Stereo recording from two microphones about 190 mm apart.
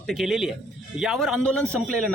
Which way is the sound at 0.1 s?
Centre (ahead or behind).